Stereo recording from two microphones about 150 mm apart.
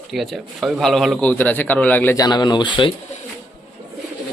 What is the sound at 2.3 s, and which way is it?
Speech, 30° left (ahead or behind).